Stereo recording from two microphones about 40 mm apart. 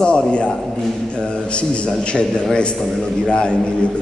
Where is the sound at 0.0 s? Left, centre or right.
Left.